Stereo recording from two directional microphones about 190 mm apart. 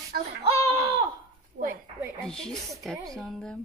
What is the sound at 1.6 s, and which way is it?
Speech, 70° right (ahead or behind).